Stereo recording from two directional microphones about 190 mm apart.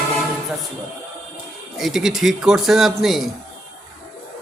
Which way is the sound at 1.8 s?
Centre (ahead or behind).